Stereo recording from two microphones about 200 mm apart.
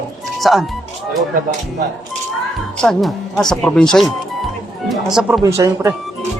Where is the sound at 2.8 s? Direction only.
Centre (ahead or behind).